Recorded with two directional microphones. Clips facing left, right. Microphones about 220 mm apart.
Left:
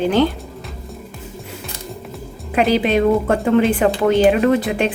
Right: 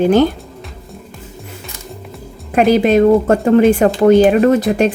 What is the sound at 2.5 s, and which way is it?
A woman's voice, 45° right (ahead or behind).